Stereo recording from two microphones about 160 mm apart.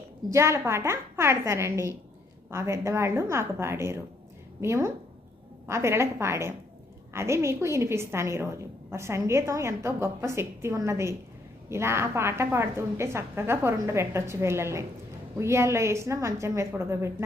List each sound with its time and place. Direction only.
0.3 s a woman's voice: 15° right (ahead or behind)